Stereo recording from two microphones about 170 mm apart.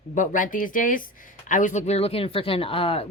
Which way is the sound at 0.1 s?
50° left (ahead or behind).